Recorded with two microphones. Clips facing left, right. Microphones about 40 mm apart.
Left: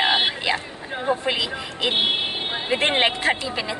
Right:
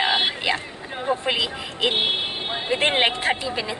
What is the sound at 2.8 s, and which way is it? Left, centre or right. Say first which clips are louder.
Speech: even; centre.